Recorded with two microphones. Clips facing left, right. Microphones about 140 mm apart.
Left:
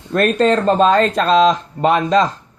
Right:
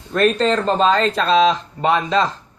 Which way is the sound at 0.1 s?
50° left (ahead or behind).